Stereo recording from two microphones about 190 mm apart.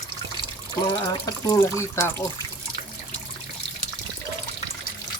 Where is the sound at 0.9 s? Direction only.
20° left (ahead or behind).